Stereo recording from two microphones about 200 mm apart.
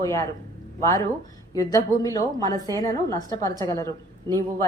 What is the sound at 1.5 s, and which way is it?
Speech, 15° left (ahead or behind).